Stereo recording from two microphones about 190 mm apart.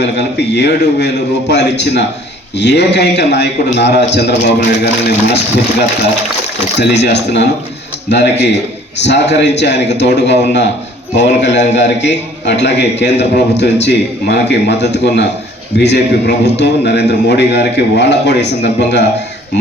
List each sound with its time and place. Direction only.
0.0 s a man's voice: 65° left (ahead or behind)
6.7 s a man's voice: 65° left (ahead or behind)